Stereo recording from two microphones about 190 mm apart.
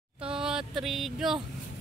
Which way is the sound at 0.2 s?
5° right (ahead or behind).